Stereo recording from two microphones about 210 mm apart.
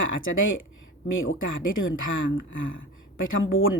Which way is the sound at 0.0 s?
65° left (ahead or behind).